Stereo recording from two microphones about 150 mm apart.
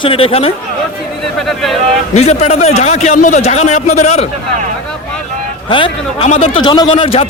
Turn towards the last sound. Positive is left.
turn(degrees=40)  # may be behind; listen again after turning